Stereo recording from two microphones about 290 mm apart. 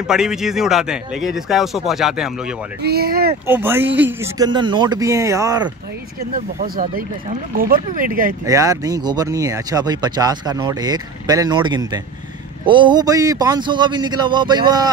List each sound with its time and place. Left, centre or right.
0.0 s speech: centre
2.8 s speech: right
3.4 s speech: centre
6.3 s speech: right
8.5 s speech: centre